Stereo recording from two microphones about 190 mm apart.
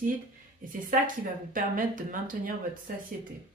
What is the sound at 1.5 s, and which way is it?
Speech, 45° right (ahead or behind).